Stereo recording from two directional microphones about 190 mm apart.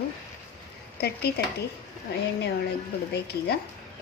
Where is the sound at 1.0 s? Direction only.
55° left (ahead or behind).